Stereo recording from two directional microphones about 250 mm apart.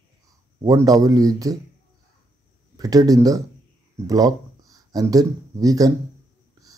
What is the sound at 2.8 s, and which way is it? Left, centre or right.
Speech, centre.